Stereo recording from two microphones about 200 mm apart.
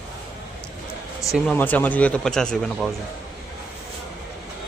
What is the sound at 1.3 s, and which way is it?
Speech, 5° left (ahead or behind).